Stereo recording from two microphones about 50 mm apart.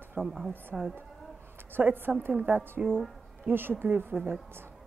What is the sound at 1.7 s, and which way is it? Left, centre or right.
A woman's voice, right.